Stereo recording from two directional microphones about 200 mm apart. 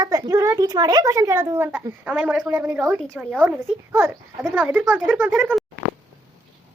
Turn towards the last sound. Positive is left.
turn(degrees=-5)  # may be behind; listen again after turning